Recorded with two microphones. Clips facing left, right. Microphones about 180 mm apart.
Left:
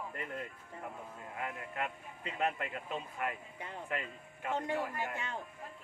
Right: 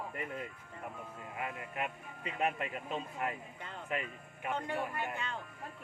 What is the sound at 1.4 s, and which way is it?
Speech, 15° right (ahead or behind).